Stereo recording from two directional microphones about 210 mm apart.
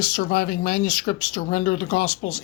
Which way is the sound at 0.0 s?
45° left (ahead or behind).